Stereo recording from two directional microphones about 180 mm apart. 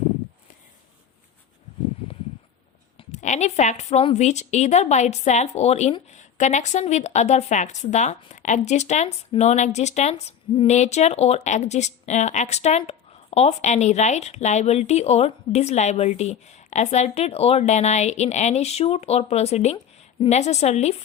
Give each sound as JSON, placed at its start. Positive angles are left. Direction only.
{"t": 3.0, "sound": "speech", "side_deg": 40}